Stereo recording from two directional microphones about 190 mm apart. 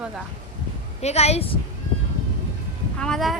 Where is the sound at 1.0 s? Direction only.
35° left (ahead or behind).